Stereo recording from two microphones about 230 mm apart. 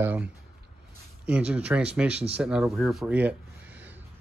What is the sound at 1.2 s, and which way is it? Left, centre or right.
Speech, centre.